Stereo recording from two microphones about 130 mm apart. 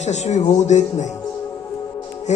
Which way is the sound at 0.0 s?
65° left (ahead or behind).